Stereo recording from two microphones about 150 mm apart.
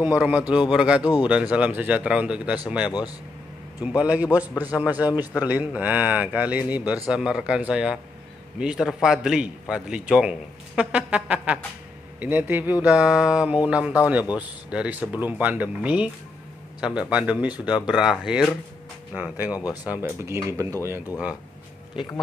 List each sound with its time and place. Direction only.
0.0 s a man's voice: 10° right (ahead or behind)
1.0 s speech: 30° left (ahead or behind)
1.3 s speech: 10° right (ahead or behind)
3.8 s a man's voice: 10° right (ahead or behind)
17.1 s a man's voice: 10° right (ahead or behind)